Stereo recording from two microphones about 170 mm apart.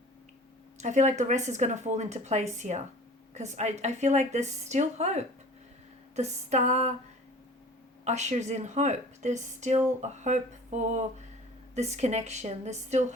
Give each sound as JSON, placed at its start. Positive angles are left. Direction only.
{"t": 0.8, "sound": "a woman's voice", "side_deg": -45}
{"t": 8.0, "sound": "a woman's voice", "side_deg": -40}